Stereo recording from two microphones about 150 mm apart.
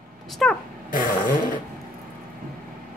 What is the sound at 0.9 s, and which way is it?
Fart, 65° left (ahead or behind).